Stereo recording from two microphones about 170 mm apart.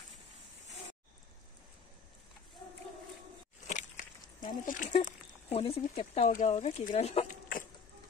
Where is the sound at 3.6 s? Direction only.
45° left (ahead or behind).